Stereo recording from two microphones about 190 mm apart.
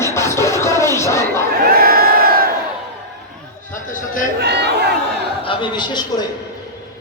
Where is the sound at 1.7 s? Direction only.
50° right (ahead or behind).